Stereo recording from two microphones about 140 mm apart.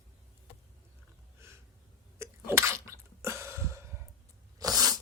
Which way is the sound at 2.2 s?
20° right (ahead or behind).